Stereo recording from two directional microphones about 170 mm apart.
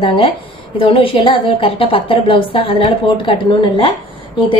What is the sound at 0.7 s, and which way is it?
A woman's voice, 30° left (ahead or behind).